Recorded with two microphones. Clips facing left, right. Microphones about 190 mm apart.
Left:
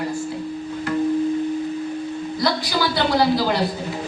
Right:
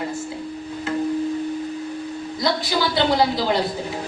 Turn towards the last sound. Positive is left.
turn(degrees=-20)  # may be behind; listen again after turning